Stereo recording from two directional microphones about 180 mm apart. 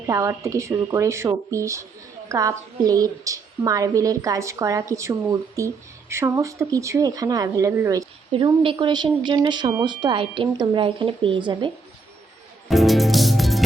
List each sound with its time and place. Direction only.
0.1 s a woman's voice: 15° right (ahead or behind)
8.3 s a woman's voice: 30° right (ahead or behind)
12.6 s music: centre (ahead or behind)